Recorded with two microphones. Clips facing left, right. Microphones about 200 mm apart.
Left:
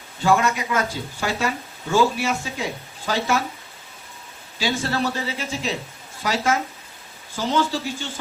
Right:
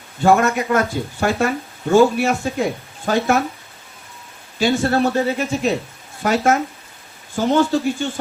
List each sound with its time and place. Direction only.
0.2 s speech: 55° right (ahead or behind)
4.5 s speech: 50° right (ahead or behind)